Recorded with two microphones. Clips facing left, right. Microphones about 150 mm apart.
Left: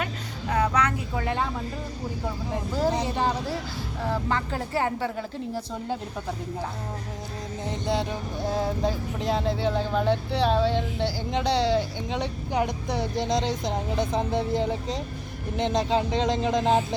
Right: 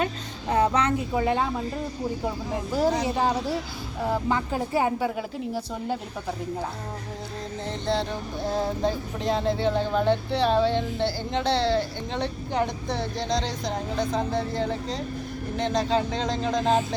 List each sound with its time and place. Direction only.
0.5 s speech: 30° right (ahead or behind)
3.0 s speech: 10° right (ahead or behind)
7.7 s speech: 15° left (ahead or behind)